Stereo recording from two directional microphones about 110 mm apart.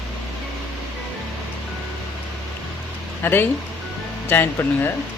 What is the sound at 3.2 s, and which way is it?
Speech, 20° left (ahead or behind).